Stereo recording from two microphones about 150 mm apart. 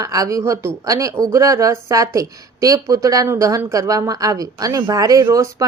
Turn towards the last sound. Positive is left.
turn(degrees=-20)  # may be behind; listen again after turning